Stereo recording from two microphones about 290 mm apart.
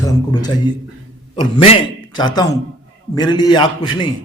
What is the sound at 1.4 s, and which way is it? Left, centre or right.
A man's voice, centre.